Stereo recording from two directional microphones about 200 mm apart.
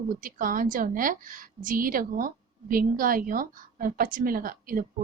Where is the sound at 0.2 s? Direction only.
45° right (ahead or behind).